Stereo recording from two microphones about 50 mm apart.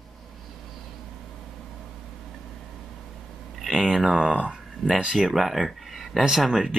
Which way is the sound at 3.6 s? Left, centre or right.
Centre.